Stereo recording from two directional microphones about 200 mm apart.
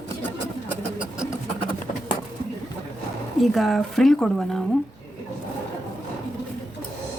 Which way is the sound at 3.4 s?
Centre (ahead or behind).